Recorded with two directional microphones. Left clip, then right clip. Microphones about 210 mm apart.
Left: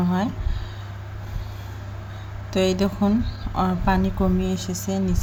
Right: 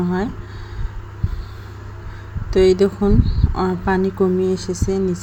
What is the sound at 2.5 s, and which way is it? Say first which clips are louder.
A woman's voice: right 8 dB; 5° right (ahead or behind).